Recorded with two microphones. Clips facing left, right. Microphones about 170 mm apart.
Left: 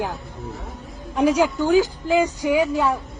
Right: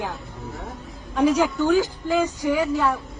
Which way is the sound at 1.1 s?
10° left (ahead or behind).